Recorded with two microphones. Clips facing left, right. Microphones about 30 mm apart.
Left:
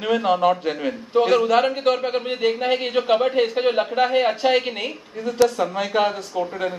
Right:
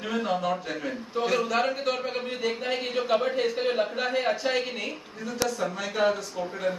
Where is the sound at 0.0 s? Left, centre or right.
Left.